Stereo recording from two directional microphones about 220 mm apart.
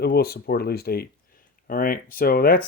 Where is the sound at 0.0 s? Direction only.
45° left (ahead or behind).